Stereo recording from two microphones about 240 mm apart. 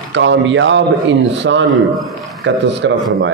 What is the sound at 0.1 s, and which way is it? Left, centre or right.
Speech, right.